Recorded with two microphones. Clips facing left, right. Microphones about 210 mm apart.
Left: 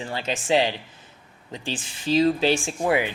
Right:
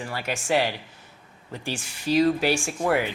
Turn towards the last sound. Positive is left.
turn(degrees=15)  # may be behind; listen again after turning